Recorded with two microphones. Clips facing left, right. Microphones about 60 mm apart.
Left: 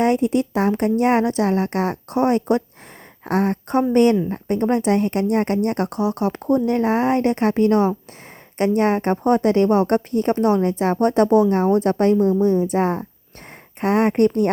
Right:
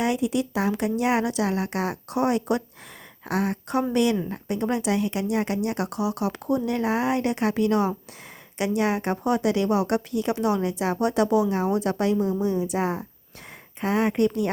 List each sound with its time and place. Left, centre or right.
0.0 s a woman's voice: left
13.8 s speech: left